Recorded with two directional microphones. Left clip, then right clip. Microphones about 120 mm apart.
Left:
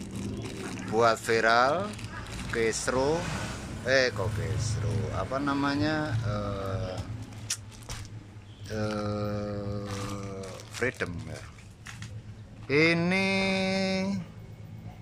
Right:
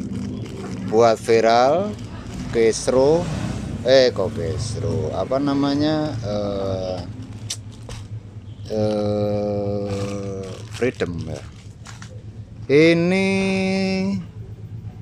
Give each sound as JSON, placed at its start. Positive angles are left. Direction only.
{"t": 0.9, "sound": "speech", "side_deg": -25}
{"t": 7.5, "sound": "a sound", "side_deg": -30}
{"t": 12.6, "sound": "speech", "side_deg": -30}